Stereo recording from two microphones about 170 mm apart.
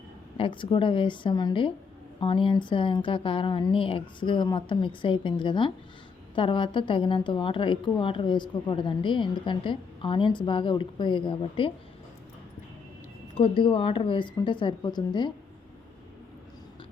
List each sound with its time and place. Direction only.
0.3 s a woman's voice: 30° left (ahead or behind)
13.3 s a woman's voice: 35° left (ahead or behind)